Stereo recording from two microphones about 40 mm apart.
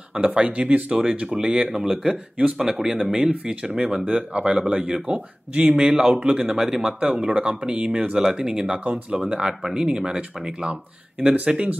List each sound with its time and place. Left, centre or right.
0.1 s speech: right
0.5 s speech: right; by 3.0 s centre
3.6 s speech: right
5.0 s speech: right
5.7 s speech: centre
6.1 s speech: right
6.4 s speech: centre
7.0 s speech: right
8.7 s speech: right
10.7 s speech: right